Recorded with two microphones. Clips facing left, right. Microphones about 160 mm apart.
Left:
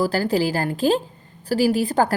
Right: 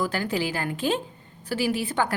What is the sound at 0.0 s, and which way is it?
A woman's voice, 35° left (ahead or behind).